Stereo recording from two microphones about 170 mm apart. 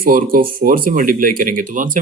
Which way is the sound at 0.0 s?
55° right (ahead or behind).